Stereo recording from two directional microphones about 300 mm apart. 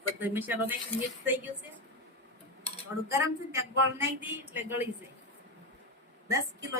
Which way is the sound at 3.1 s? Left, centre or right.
Centre.